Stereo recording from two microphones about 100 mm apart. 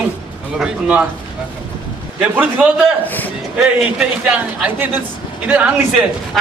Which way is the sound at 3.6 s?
10° right (ahead or behind).